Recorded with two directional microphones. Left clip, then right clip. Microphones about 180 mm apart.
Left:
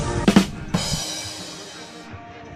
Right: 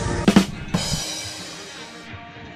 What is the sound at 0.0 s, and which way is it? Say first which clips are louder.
Drum kit: even; centre (ahead or behind).